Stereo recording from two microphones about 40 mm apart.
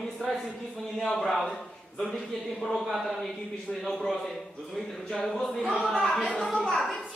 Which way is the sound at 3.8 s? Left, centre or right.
Centre.